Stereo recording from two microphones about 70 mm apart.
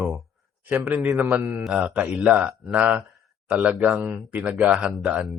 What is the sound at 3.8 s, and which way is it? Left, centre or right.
A man's voice, centre.